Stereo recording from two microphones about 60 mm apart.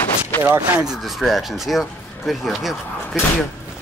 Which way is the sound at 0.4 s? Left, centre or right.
Right.